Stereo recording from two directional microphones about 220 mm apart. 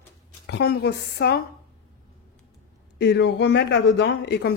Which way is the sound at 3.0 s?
50° left (ahead or behind).